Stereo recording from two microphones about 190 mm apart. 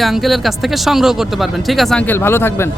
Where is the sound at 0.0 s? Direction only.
Centre (ahead or behind).